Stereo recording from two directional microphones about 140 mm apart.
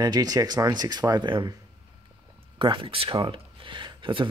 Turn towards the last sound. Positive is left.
turn(degrees=-35)  # may be behind; listen again after turning